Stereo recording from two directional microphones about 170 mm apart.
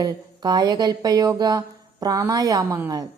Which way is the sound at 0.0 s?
25° right (ahead or behind).